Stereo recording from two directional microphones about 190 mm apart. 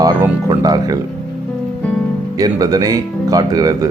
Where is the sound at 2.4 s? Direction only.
20° right (ahead or behind).